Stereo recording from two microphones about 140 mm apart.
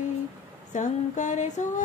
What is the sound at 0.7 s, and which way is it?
Music, 60° left (ahead or behind).